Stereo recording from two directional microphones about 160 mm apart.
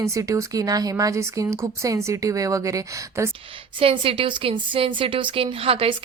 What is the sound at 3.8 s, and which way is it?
A woman's voice, 35° right (ahead or behind).